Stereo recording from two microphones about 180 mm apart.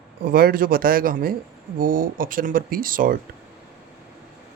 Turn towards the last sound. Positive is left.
turn(degrees=-50)  # may be behind; listen again after turning